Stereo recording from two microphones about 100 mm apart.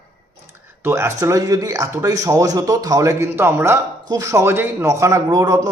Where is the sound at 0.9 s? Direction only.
30° right (ahead or behind).